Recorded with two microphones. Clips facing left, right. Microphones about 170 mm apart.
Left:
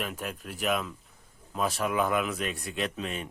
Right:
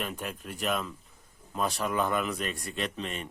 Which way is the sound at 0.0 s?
Centre (ahead or behind).